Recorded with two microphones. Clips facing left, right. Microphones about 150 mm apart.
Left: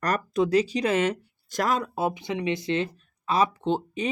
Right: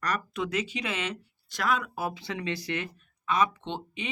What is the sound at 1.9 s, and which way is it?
Speech, 20° left (ahead or behind).